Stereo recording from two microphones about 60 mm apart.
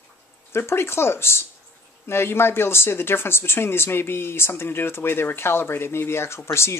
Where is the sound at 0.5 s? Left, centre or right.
Left.